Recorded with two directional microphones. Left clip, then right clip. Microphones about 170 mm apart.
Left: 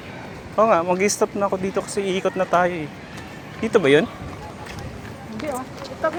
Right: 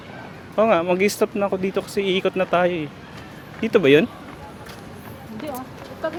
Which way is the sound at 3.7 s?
45° right (ahead or behind).